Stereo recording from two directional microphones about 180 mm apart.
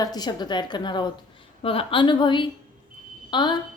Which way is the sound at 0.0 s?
20° left (ahead or behind).